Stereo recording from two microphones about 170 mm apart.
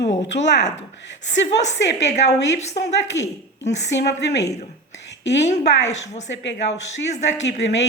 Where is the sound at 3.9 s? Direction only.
90° left.